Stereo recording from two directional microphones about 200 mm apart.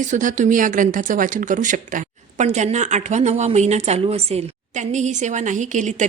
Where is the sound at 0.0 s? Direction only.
40° right (ahead or behind).